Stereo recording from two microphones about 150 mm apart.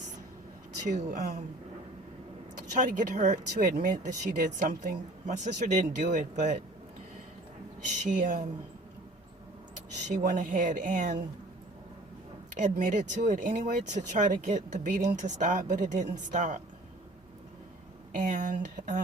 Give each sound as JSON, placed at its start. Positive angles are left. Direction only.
{"t": 0.9, "sound": "speech", "side_deg": -55}
{"t": 2.7, "sound": "speech", "side_deg": -60}
{"t": 7.9, "sound": "speech", "side_deg": -55}
{"t": 10.2, "sound": "speech", "side_deg": -60}
{"t": 12.7, "sound": "speech", "side_deg": -60}
{"t": 18.1, "sound": "speech", "side_deg": -65}